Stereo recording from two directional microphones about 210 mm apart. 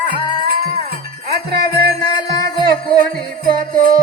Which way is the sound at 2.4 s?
45° right (ahead or behind).